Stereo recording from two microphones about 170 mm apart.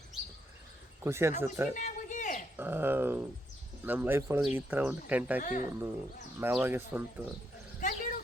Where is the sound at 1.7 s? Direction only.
45° left (ahead or behind).